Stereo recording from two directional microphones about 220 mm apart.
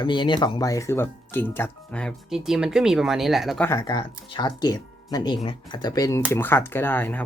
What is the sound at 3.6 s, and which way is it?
Speech, 15° left (ahead or behind).